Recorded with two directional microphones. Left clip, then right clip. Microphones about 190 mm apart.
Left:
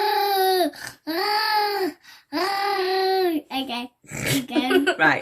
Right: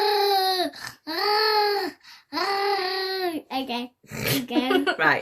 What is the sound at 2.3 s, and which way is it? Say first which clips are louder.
Child singing: left 1 dB; centre (ahead or behind).